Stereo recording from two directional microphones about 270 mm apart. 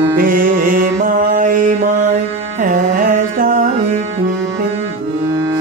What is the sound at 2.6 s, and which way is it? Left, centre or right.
Carnatic music, right.